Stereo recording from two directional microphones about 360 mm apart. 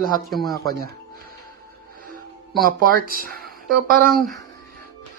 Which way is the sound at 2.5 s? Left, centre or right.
Right.